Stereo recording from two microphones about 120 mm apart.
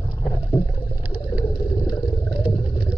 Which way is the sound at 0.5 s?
45° left (ahead or behind).